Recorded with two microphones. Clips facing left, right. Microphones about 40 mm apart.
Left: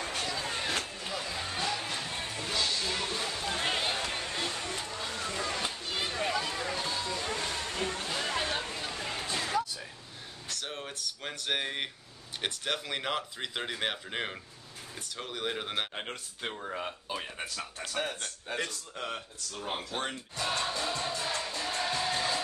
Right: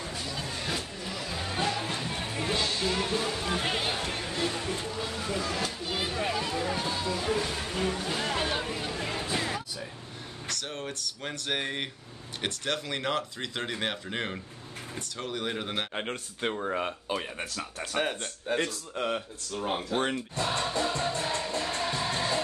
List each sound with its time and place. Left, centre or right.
0.0 s vehicle: left
0.4 s vehicle: left
1.3 s music: centre
2.1 s music: right; by 4.7 s centre
4.8 s a sound: centre
10.6 s speech: centre
15.9 s speech: centre
17.9 s speech: right
20.1 s speech: right
21.1 s music: right